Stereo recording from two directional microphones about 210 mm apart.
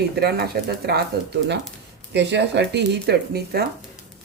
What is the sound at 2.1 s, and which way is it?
Speech, 55° right (ahead or behind).